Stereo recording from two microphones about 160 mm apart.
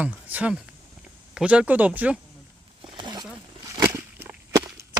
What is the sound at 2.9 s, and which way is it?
Wild animals, 30° right (ahead or behind).